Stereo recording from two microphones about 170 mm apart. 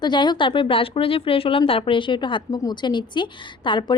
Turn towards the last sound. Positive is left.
turn(degrees=25)  # may be behind; listen again after turning